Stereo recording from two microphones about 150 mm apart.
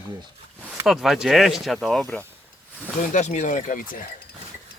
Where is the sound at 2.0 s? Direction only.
10° left (ahead or behind).